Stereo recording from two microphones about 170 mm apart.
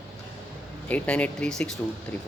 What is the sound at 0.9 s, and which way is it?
Speech, 10° left (ahead or behind).